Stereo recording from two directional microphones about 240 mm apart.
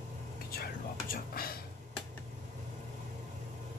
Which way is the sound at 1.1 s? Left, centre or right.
Left.